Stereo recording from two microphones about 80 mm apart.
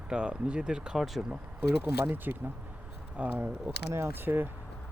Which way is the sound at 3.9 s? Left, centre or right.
Right.